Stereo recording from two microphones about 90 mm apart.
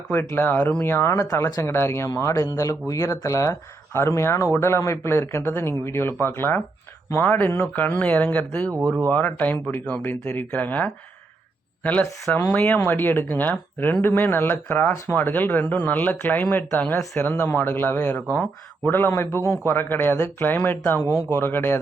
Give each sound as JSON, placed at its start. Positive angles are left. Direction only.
{"t": 0.1, "sound": "speech", "side_deg": 25}
{"t": 1.6, "sound": "speech", "side_deg": 30}